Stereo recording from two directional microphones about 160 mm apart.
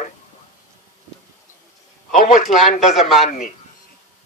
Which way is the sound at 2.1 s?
55° left (ahead or behind).